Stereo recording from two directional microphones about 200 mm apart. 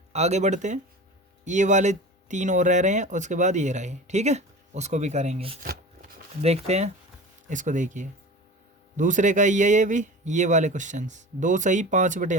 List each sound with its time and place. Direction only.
0.1 s speech: 35° right (ahead or behind)
5.6 s shuffling cards: 50° right (ahead or behind)
6.4 s speech: 30° right (ahead or behind)